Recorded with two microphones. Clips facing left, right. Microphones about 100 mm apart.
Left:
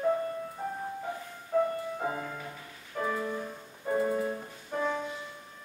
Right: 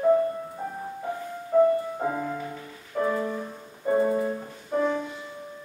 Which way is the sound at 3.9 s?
20° right (ahead or behind).